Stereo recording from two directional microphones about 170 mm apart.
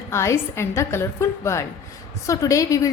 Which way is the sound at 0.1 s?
15° left (ahead or behind).